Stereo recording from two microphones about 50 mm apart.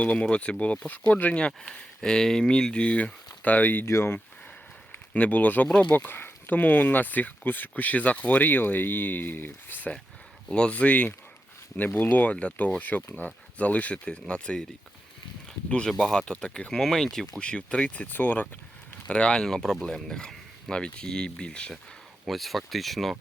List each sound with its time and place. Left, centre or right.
0.0 s speech: left
1.7 s speech: centre; by 3.8 s left
3.8 s speech: left
4.9 s speech: left
5.9 s speech: left
10.5 s speech: left
11.9 s speech: left
12.1 s speech: left
16.0 s speech: centre
17.4 s speech: left
19.0 s speech: left
19.5 s speech: centre
22.3 s speech: centre